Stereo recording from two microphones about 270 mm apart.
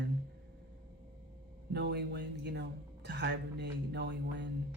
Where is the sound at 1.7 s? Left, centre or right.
Right.